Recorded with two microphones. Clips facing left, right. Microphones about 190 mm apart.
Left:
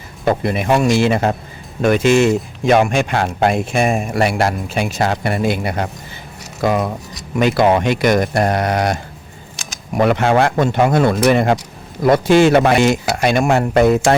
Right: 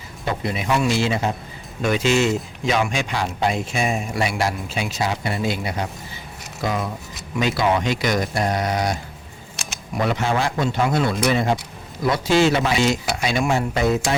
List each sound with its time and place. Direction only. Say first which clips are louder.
0.3 s speech: left 7 dB; 55° left (ahead or behind)
10.0 s speech: left 8 dB; 60° left (ahead or behind)